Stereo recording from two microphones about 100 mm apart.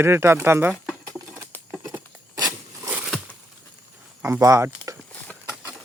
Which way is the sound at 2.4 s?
40° right (ahead or behind).